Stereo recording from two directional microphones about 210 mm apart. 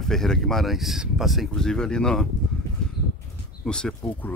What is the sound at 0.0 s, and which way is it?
Speech, centre (ahead or behind).